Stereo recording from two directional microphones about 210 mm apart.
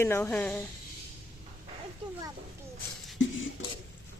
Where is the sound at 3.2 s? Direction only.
65° left (ahead or behind).